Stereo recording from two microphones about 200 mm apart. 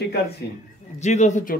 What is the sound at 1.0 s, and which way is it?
Speech, 35° left (ahead or behind).